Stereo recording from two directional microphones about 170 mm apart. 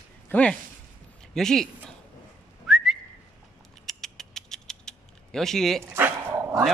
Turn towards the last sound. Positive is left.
turn(degrees=-20)  # may be behind; listen again after turning